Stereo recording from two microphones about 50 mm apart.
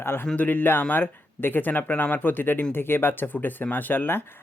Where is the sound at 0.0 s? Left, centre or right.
Left.